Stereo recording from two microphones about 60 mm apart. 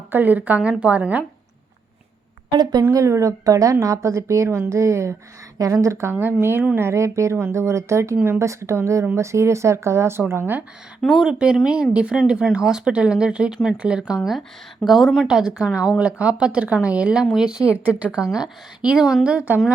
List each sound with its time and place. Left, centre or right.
0.1 s a woman's voice: right
2.9 s a woman's voice: right
6.7 s a woman's voice: right
11.2 s a woman's voice: centre
15.3 s a woman's voice: centre